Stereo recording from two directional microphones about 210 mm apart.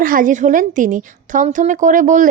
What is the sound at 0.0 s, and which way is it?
Speech, 40° right (ahead or behind).